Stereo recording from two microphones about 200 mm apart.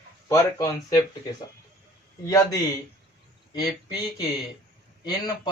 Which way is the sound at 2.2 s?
15° left (ahead or behind).